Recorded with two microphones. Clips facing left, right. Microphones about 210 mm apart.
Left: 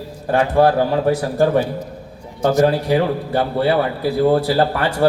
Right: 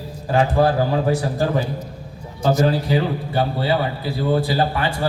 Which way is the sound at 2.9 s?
65° left (ahead or behind).